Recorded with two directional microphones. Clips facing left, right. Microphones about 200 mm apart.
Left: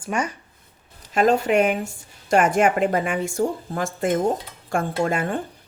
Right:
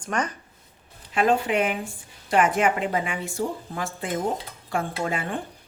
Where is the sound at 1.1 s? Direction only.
45° left (ahead or behind).